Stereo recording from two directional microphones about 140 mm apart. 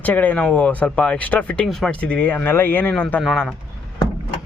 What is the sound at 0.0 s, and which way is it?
Speech, 10° left (ahead or behind).